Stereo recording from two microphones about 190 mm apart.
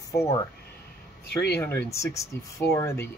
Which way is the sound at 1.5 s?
10° left (ahead or behind).